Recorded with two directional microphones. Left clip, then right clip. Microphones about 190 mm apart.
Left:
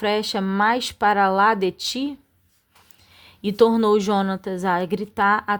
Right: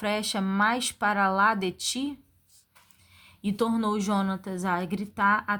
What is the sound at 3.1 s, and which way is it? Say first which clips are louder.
A woman's voice: left 11 dB; 40° left (ahead or behind).